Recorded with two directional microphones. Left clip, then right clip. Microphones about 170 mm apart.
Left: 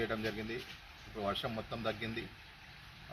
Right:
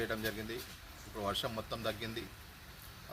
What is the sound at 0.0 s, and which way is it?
Speech, 25° right (ahead or behind).